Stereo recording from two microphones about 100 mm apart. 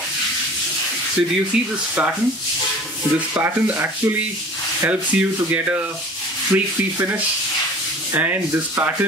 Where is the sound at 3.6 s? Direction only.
20° right (ahead or behind).